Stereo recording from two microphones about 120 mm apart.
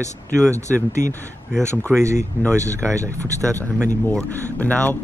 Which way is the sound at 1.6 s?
25° right (ahead or behind).